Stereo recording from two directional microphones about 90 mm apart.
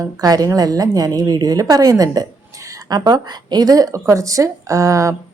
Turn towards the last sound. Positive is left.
turn(degrees=-35)  # may be behind; listen again after turning